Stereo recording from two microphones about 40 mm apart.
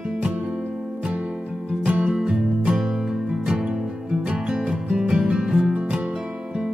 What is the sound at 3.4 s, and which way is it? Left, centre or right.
Music, centre.